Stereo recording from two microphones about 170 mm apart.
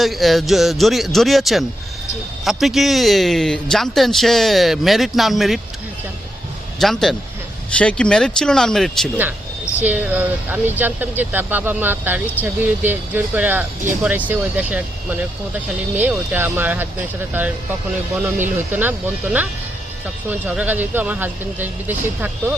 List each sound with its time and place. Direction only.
0.0 s a man's voice: centre (ahead or behind)
6.7 s a man's voice: centre (ahead or behind)
9.8 s speech: 10° right (ahead or behind)
18.7 s speech: 10° right (ahead or behind)